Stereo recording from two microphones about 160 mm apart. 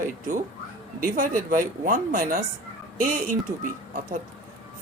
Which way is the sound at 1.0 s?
60° right (ahead or behind).